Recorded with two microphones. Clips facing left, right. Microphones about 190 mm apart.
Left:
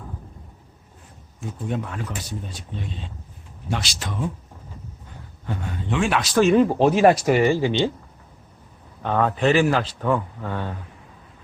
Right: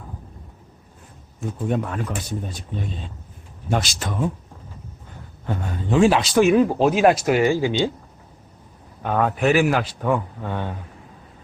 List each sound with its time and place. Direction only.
1.6 s speech: 50° right (ahead or behind)
5.9 s speech: 30° right (ahead or behind)
6.3 s speech: 10° right (ahead or behind)
9.0 s speech: 5° right (ahead or behind)